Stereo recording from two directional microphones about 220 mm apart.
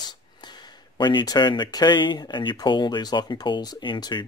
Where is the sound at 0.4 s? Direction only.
20° left (ahead or behind).